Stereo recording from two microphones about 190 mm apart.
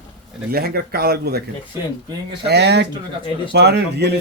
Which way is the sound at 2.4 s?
60° right (ahead or behind).